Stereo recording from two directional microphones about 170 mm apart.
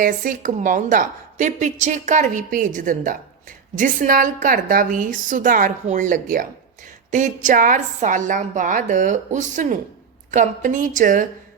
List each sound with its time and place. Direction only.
0.0 s a woman's voice: 50° right (ahead or behind)